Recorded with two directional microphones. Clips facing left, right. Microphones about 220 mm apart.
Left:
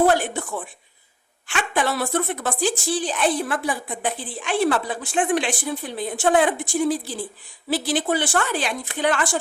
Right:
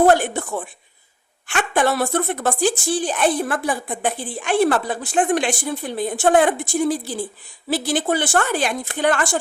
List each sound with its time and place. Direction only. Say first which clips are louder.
0.0 s a woman's voice: right 3 dB; 50° right (ahead or behind)
7.7 s a woman's voice: right 2 dB; 45° right (ahead or behind)